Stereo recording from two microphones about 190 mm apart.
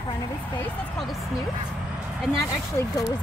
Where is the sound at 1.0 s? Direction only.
Centre (ahead or behind).